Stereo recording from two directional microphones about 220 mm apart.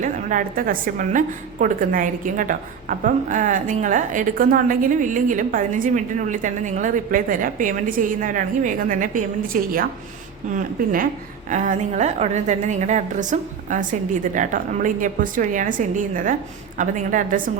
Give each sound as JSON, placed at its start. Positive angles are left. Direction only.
{"t": 0.0, "sound": "a woman's voice", "side_deg": -35}
{"t": 16.7, "sound": "a woman's voice", "side_deg": -35}